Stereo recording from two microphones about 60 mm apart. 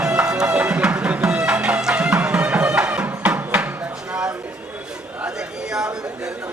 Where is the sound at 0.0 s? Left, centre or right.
Centre.